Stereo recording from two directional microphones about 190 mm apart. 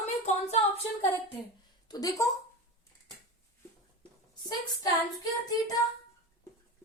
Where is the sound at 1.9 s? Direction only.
20° left (ahead or behind).